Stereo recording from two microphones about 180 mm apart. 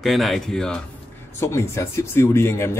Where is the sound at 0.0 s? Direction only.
Centre (ahead or behind).